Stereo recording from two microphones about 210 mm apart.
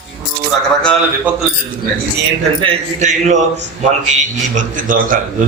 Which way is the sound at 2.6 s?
30° right (ahead or behind).